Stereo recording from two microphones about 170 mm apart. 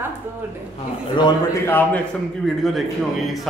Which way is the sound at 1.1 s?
25° left (ahead or behind).